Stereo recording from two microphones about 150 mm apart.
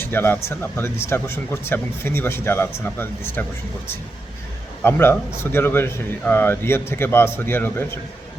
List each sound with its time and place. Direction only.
0.0 s speech: 15° left (ahead or behind)
4.8 s speech: 15° left (ahead or behind)